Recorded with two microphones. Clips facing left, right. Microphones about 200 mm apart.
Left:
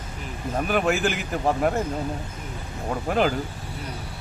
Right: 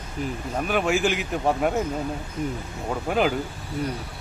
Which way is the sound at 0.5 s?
Centre (ahead or behind).